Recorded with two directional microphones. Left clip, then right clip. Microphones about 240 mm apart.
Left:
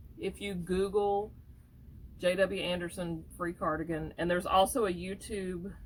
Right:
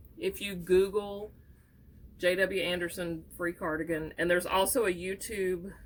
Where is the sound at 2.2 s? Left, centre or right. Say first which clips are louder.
Right 1 dB; centre.